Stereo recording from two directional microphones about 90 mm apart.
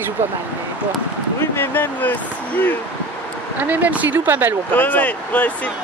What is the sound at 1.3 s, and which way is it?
Speech, 25° left (ahead or behind).